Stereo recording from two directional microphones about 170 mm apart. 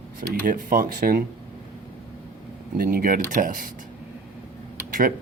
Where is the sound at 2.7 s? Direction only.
55° right (ahead or behind).